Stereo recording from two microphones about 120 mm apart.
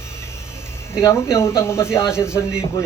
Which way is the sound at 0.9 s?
20° left (ahead or behind).